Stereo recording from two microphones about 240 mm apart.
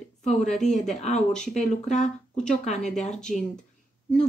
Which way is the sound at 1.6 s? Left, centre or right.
Left.